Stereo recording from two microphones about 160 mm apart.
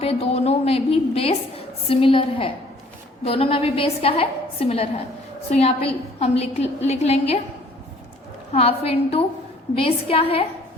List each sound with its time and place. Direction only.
0.0 s a woman's voice: 35° left (ahead or behind)
8.5 s a woman's voice: 40° left (ahead or behind)